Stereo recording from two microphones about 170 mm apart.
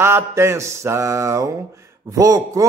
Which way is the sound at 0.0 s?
15° right (ahead or behind).